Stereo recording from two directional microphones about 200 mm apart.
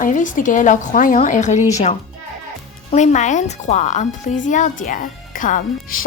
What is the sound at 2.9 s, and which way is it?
A woman's voice, 35° left (ahead or behind).